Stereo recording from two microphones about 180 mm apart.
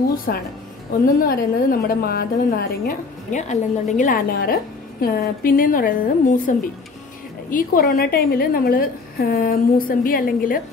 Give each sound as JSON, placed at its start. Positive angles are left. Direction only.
{"t": 0.3, "sound": "a woman's voice", "side_deg": 55}
{"t": 3.3, "sound": "a woman's voice", "side_deg": 40}